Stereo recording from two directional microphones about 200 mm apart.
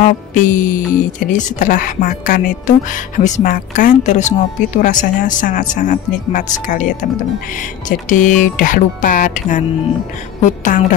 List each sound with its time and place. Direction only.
0.0 s speech: 40° left (ahead or behind)
8.1 s speech: 40° left (ahead or behind)